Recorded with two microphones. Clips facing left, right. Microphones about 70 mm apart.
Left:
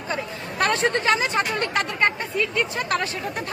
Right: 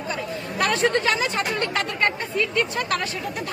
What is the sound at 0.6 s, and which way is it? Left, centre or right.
Speech, left.